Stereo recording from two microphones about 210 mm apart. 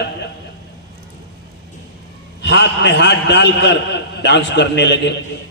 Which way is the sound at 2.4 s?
55° left (ahead or behind).